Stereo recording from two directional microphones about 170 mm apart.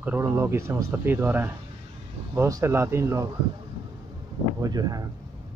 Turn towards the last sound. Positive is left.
turn(degrees=-20)  # may be behind; listen again after turning